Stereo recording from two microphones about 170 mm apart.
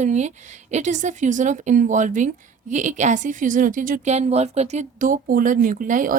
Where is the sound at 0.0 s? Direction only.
45° right (ahead or behind).